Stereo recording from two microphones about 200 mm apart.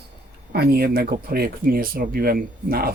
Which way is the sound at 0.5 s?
50° right (ahead or behind).